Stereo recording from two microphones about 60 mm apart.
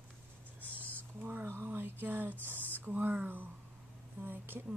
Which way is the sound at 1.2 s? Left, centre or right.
Right.